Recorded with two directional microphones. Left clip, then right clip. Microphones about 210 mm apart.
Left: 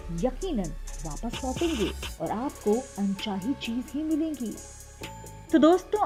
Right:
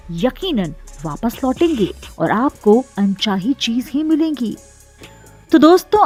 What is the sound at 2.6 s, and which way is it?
Speech, 15° right (ahead or behind).